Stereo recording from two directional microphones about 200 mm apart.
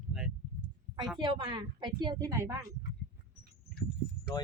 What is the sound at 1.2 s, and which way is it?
A woman's voice, 20° right (ahead or behind).